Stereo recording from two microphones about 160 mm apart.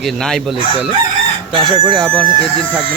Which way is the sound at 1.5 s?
30° right (ahead or behind).